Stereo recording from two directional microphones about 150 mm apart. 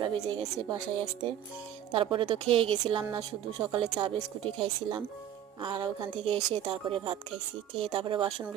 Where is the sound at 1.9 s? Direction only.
35° right (ahead or behind).